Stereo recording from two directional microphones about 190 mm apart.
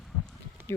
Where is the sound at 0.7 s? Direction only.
15° left (ahead or behind).